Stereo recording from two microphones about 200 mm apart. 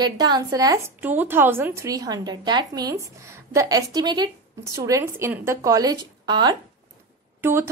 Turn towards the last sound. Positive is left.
turn(degrees=-10)  # may be behind; listen again after turning